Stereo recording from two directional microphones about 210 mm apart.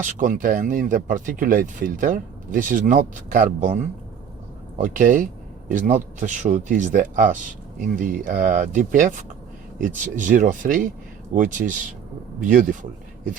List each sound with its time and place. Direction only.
0.0 s speech: 40° right (ahead or behind)
4.8 s speech: 40° right (ahead or behind)